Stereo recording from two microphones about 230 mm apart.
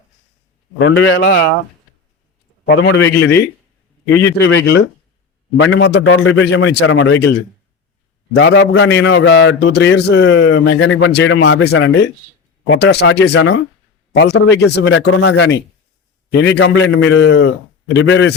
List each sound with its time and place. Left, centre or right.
0.8 s a man's voice: left
2.6 s a man's voice: left
3.2 s speech: centre
4.2 s a man's voice: left
8.4 s a man's voice: left